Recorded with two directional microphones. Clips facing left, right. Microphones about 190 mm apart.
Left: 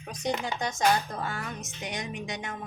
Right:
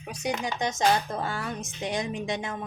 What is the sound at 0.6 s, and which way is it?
Speech, 20° right (ahead or behind).